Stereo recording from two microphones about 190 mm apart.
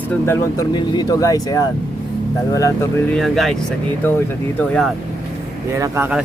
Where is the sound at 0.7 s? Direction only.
20° left (ahead or behind).